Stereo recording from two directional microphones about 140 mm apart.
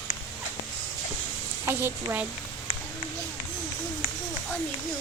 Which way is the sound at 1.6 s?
15° right (ahead or behind).